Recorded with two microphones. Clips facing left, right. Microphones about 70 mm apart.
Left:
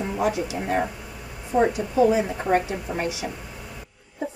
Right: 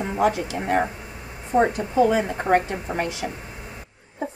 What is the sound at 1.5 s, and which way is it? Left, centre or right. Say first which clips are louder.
Speech: right 1 dB; right.